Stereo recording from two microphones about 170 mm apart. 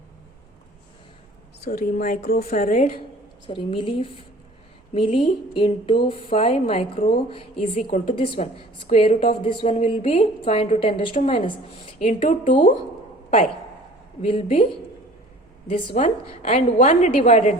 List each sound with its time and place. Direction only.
1.6 s speech: 60° left (ahead or behind)
2.5 s a woman's voice: 50° left (ahead or behind)
3.4 s a woman's voice: 30° left (ahead or behind)
11.9 s a woman's voice: 45° left (ahead or behind)
14.2 s a woman's voice: 40° left (ahead or behind)
15.6 s a woman's voice: 30° left (ahead or behind)
16.0 s a woman's voice: 45° left (ahead or behind)